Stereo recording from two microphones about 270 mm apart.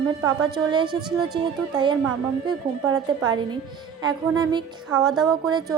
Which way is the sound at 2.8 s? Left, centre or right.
Right.